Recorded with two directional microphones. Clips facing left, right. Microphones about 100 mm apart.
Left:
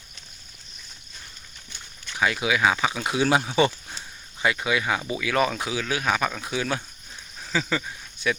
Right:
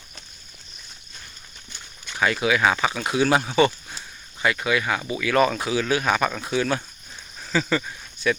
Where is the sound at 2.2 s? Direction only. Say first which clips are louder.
Right 2 dB; 5° left (ahead or behind).